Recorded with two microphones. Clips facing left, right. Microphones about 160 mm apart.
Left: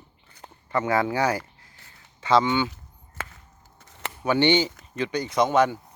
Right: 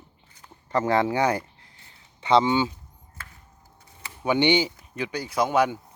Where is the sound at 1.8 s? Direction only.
20° right (ahead or behind).